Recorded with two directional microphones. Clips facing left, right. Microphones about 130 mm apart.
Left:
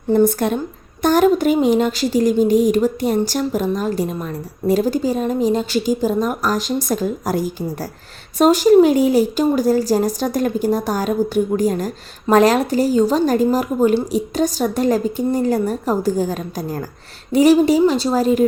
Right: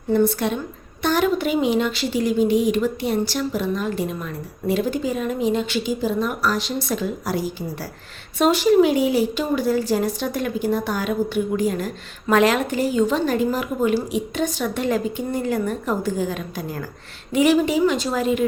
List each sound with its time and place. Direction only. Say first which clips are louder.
0.1 s a woman's voice: left 4 dB; 40° left (ahead or behind)